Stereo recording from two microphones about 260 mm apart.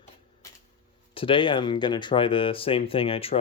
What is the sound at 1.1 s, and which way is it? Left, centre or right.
Speech, centre.